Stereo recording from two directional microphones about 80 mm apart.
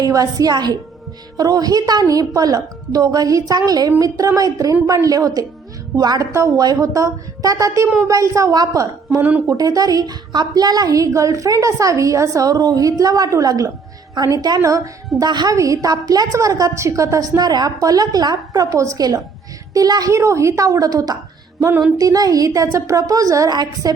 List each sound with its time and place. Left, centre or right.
0.0 s a woman's voice: right
15.5 s a woman's voice: right
23.5 s a woman's voice: right